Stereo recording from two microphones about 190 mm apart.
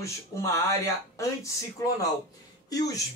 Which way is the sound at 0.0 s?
15° left (ahead or behind).